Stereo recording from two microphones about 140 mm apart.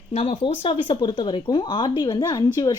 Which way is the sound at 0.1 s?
45° left (ahead or behind).